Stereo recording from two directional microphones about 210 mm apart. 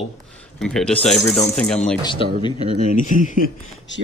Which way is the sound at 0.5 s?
5° left (ahead or behind).